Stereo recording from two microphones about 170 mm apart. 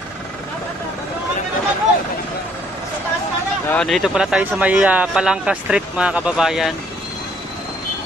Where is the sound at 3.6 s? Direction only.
5° left (ahead or behind).